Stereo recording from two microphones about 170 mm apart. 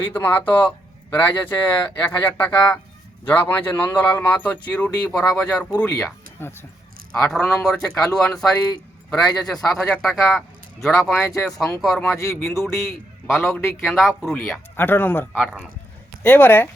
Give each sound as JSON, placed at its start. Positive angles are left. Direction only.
{"t": 0.0, "sound": "a man's voice", "side_deg": 10}
{"t": 12.0, "sound": "speech", "side_deg": 15}
{"t": 13.3, "sound": "a man's voice", "side_deg": 0}
{"t": 14.8, "sound": "speech", "side_deg": 10}
{"t": 15.3, "sound": "speech", "side_deg": -5}
{"t": 16.2, "sound": "speech", "side_deg": 10}